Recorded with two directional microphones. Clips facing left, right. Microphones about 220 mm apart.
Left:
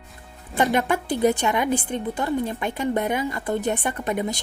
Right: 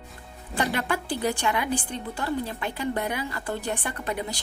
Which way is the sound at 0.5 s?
20° left (ahead or behind).